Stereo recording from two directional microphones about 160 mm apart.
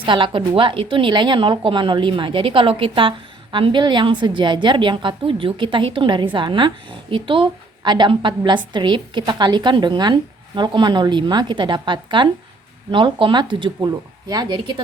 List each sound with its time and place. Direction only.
0.0 s a woman's voice: 30° right (ahead or behind)